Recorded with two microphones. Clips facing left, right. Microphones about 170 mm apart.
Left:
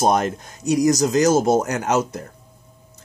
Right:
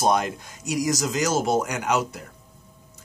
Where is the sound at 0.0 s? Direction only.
45° left (ahead or behind).